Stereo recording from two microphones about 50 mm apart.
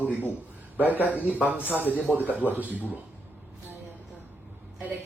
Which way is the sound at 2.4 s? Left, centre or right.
Right.